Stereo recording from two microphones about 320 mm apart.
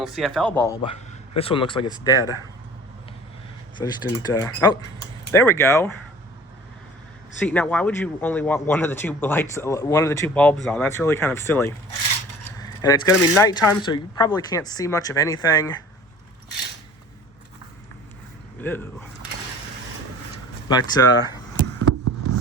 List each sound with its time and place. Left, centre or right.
0.0 s speech: centre
3.8 s speech: centre
7.4 s speech: centre
18.6 s speech: centre
20.7 s speech: centre
22.0 s a sound: right